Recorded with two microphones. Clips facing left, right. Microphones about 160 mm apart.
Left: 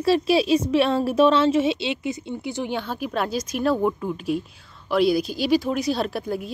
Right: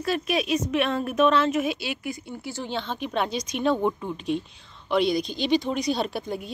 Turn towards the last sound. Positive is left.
turn(degrees=0)  # may be behind; listen again after turning